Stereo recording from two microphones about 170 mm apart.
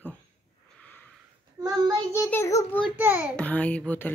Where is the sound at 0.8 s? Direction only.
10° left (ahead or behind).